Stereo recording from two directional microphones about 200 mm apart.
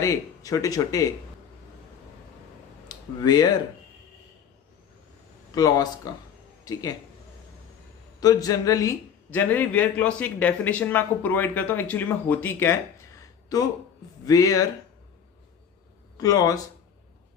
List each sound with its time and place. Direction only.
0.0 s speech: 15° left (ahead or behind)
2.9 s speech: 20° left (ahead or behind)
5.5 s speech: 20° left (ahead or behind)
8.2 s speech: 20° left (ahead or behind)
14.3 s speech: 15° left (ahead or behind)
16.1 s speech: 15° left (ahead or behind)